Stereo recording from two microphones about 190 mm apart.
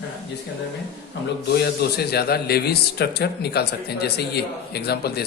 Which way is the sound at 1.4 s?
55° left (ahead or behind).